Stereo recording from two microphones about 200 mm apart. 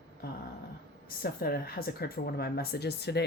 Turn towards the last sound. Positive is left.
turn(degrees=55)  # may be behind; listen again after turning